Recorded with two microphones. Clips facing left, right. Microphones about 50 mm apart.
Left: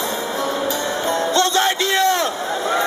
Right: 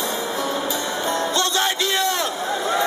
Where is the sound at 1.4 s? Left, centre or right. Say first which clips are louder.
Left 4 dB; left.